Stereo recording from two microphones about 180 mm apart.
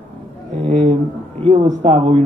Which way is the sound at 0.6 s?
35° right (ahead or behind).